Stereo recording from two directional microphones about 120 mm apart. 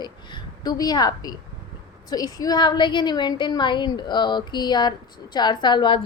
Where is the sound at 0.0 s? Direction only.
35° left (ahead or behind).